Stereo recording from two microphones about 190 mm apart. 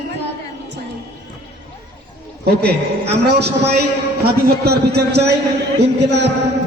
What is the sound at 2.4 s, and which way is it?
A man's voice, 60° right (ahead or behind).